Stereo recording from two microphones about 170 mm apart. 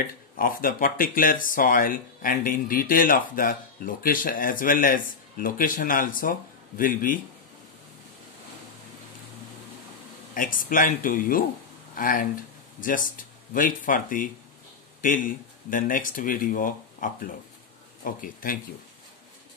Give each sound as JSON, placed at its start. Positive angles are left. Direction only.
{"t": 0.0, "sound": "speech", "side_deg": 55}
{"t": 10.3, "sound": "speech", "side_deg": 55}